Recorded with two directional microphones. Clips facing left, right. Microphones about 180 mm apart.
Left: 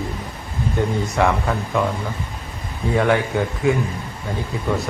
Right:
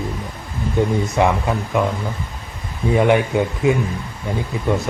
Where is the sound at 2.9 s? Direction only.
20° right (ahead or behind).